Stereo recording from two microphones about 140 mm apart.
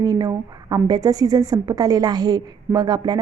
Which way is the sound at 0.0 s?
25° right (ahead or behind).